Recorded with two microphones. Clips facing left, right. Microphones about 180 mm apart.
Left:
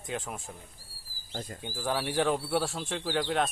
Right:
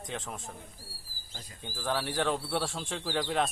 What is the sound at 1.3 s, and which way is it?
Speech, 50° left (ahead or behind).